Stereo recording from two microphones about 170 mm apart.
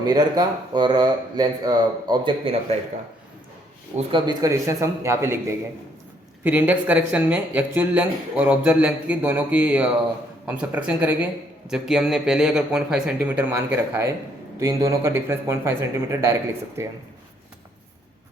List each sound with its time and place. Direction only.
0.0 s speech: 25° right (ahead or behind)
3.9 s a man's voice: 25° right (ahead or behind)